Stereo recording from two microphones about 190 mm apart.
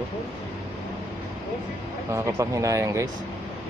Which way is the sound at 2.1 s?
15° right (ahead or behind).